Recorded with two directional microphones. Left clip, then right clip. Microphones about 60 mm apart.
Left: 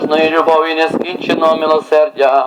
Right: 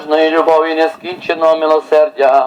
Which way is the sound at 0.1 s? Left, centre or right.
Left.